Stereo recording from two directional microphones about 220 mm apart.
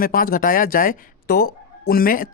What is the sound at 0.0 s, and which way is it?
Speech, 40° left (ahead or behind).